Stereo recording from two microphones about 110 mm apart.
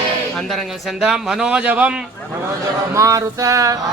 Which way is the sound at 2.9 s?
30° right (ahead or behind).